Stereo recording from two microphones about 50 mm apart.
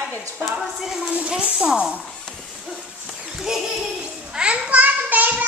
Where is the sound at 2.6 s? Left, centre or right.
Centre.